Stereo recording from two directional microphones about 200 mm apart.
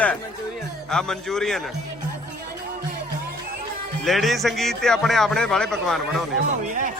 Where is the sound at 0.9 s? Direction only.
5° left (ahead or behind).